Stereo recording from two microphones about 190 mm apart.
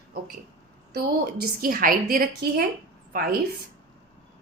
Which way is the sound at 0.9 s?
55° right (ahead or behind).